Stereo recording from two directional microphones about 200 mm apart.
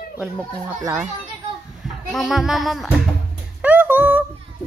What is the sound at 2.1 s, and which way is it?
Speech, centre (ahead or behind).